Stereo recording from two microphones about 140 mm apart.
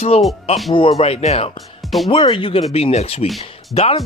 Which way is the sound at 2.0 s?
40° left (ahead or behind).